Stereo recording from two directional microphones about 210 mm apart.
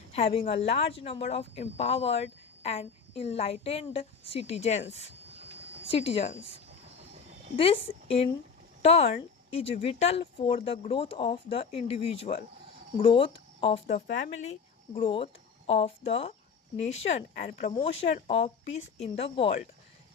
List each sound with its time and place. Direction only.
0.1 s a woman's voice: 30° left (ahead or behind)
5.9 s a woman's voice: 25° left (ahead or behind)
7.5 s a woman's voice: 25° left (ahead or behind)